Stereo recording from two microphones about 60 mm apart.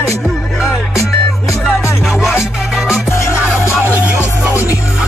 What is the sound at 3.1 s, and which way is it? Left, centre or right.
Music, left.